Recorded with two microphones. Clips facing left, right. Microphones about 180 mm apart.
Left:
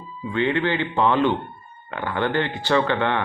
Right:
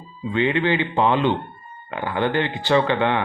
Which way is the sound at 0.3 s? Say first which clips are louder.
Right 2 dB; 15° right (ahead or behind).